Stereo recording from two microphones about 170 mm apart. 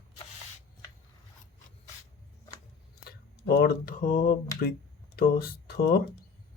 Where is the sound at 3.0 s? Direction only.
70° left (ahead or behind); by 4.3 s 50° left (ahead or behind).